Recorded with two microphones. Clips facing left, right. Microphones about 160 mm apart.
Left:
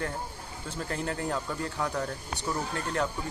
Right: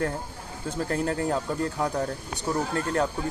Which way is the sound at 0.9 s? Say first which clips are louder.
Right 5 dB; 45° right (ahead or behind).